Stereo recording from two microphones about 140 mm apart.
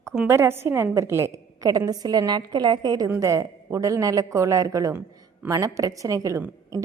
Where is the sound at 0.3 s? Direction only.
20° right (ahead or behind).